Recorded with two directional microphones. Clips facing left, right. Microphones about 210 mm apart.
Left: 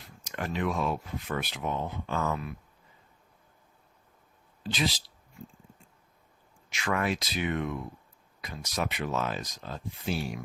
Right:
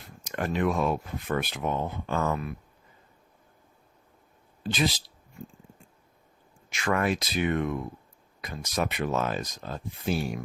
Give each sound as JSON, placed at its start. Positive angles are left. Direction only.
{"t": 0.3, "sound": "speech", "side_deg": -50}
{"t": 4.6, "sound": "speech", "side_deg": -50}
{"t": 6.7, "sound": "speech", "side_deg": -50}